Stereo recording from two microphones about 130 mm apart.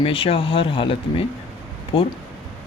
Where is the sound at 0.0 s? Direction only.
45° left (ahead or behind).